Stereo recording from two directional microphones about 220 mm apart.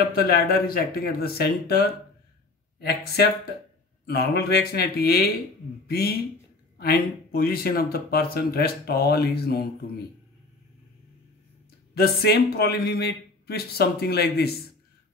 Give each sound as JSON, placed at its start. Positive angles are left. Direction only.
{"t": 0.0, "sound": "speech", "side_deg": 45}
{"t": 11.9, "sound": "speech", "side_deg": 45}